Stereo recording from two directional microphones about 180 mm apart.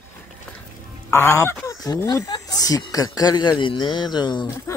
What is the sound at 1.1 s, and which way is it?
Speech, 15° left (ahead or behind).